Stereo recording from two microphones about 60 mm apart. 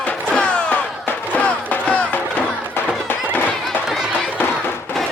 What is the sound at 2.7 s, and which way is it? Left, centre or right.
Music, left.